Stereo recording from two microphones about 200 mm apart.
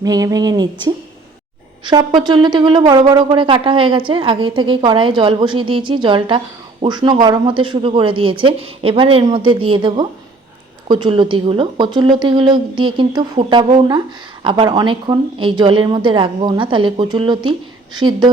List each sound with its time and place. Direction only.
0.0 s a woman's voice: 20° right (ahead or behind)